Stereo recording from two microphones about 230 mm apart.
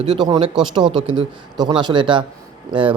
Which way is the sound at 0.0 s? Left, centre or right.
Right.